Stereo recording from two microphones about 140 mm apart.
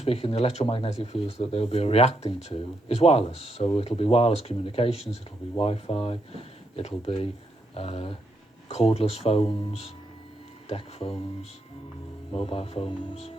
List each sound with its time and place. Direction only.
0.0 s speech: 45° left (ahead or behind)
12.3 s speech: 45° left (ahead or behind)